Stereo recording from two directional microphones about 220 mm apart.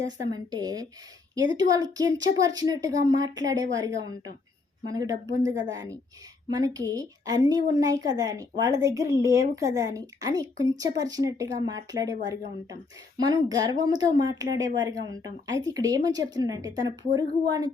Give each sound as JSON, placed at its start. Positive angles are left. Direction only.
{"t": 0.0, "sound": "a woman's voice", "side_deg": -15}